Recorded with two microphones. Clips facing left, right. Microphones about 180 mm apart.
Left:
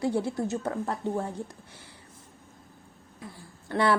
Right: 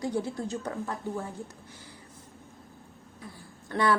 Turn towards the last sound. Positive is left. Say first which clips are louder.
# left 2 dB
turn(degrees=30)  # may be behind; listen again after turning